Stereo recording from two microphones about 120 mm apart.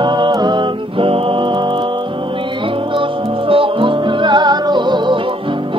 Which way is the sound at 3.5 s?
45° right (ahead or behind).